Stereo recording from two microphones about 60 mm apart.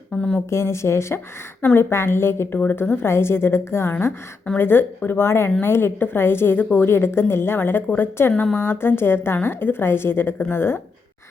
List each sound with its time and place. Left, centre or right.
0.2 s a woman's voice: left
0.5 s a woman's voice: left
2.6 s a woman's voice: left